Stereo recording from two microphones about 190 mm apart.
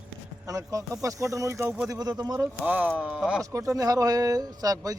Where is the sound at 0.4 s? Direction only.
15° right (ahead or behind).